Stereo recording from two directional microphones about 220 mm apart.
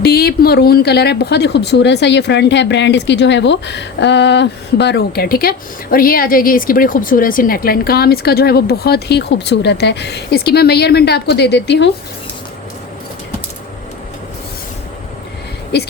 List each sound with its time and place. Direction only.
0.0 s a woman's voice: 45° left (ahead or behind)